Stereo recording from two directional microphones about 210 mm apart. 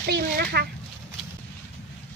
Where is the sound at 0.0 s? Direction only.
50° right (ahead or behind).